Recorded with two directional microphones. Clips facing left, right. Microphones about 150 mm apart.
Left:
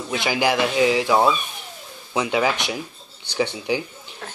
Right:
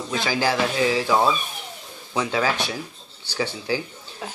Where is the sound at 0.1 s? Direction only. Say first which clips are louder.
Left 2 dB; 15° left (ahead or behind).